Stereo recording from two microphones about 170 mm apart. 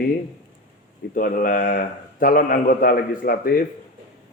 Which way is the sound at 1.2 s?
55° left (ahead or behind).